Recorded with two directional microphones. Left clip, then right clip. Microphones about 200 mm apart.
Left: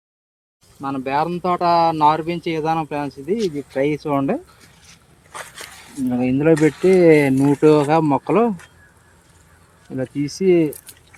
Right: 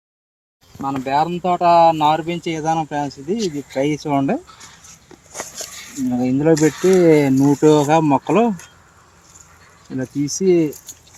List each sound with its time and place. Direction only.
0.8 s speech: 45° right (ahead or behind)
5.5 s speech: 5° right (ahead or behind); by 8.4 s 30° right (ahead or behind)
9.9 s speech: 20° right (ahead or behind)